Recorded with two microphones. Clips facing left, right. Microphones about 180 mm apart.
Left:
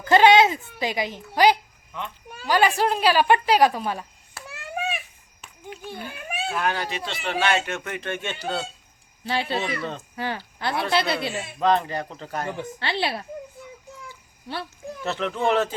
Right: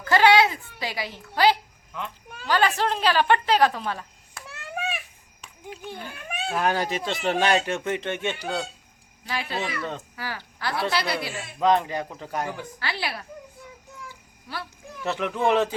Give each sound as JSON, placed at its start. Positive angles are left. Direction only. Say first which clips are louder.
{"t": 0.0, "sound": "a child's voice", "louder": "left 3 dB", "side_deg": 20}
{"t": 1.9, "sound": "a woman's voice", "louder": "left 1 dB", "side_deg": 5}
{"t": 4.4, "sound": "a sound", "louder": "left 2 dB", "side_deg": 0}
{"t": 5.8, "sound": "a child's voice", "louder": "left 2 dB", "side_deg": 10}
{"t": 6.6, "sound": "speech", "louder": "right 4 dB", "side_deg": -40}
{"t": 9.2, "sound": "speech", "louder": "left 4 dB", "side_deg": 30}
{"t": 11.6, "sound": "speech", "louder": "even", "side_deg": -15}
{"t": 12.5, "sound": "speech", "louder": "left 3 dB", "side_deg": 25}
{"t": 14.4, "sound": "a child's voice", "louder": "left 3 dB", "side_deg": 25}
{"t": 15.0, "sound": "speech", "louder": "even", "side_deg": -10}